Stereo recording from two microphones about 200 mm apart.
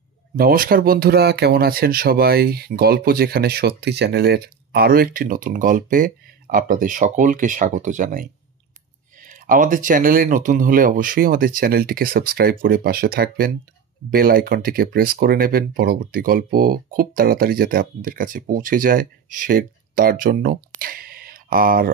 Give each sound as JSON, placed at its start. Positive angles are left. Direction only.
{"t": 0.4, "sound": "speech", "side_deg": -45}